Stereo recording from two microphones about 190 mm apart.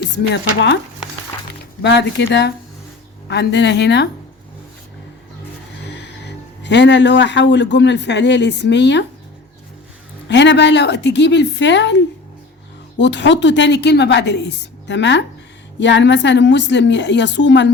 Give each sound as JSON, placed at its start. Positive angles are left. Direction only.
{"t": 0.0, "sound": "a woman's voice", "side_deg": 65}
{"t": 1.8, "sound": "speech", "side_deg": 65}
{"t": 5.9, "sound": "speech", "side_deg": 65}
{"t": 10.2, "sound": "a woman's voice", "side_deg": 70}